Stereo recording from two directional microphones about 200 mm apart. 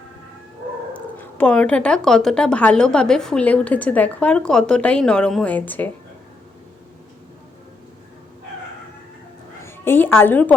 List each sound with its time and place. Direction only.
0.9 s speech: 10° left (ahead or behind)
9.6 s a woman's voice: 10° left (ahead or behind)